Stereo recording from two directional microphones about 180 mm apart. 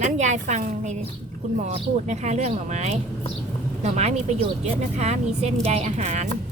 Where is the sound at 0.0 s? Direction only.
40° right (ahead or behind).